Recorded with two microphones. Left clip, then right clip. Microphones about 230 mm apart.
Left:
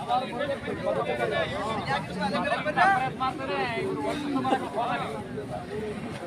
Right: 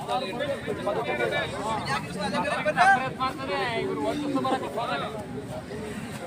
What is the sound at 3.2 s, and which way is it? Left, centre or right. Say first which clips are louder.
Speech: even; right.